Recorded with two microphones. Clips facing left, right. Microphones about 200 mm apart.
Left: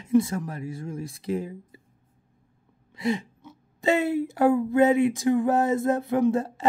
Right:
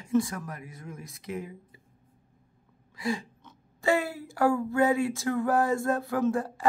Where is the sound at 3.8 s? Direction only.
20° left (ahead or behind).